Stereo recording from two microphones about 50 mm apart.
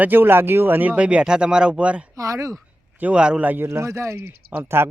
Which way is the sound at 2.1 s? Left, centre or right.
Right.